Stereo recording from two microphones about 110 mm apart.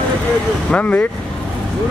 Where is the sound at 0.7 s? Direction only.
15° left (ahead or behind).